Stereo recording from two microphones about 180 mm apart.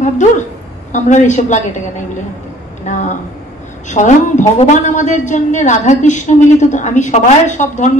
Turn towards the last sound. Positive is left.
turn(degrees=40)  # may be behind; listen again after turning